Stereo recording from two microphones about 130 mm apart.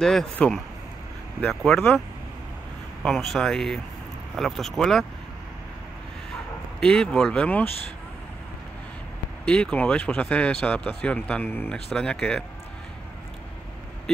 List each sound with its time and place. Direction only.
0.0 s speech: 5° left (ahead or behind)
6.8 s speech: 5° left (ahead or behind)
9.5 s speech: 10° left (ahead or behind)
11.7 s speech: 5° left (ahead or behind)